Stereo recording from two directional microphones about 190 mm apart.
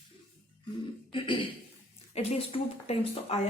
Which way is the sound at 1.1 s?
25° left (ahead or behind).